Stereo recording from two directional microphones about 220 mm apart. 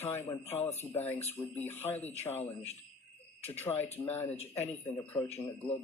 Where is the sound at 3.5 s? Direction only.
10° left (ahead or behind).